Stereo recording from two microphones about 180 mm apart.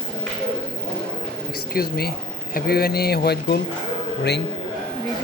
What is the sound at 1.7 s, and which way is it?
Speech, 60° left (ahead or behind).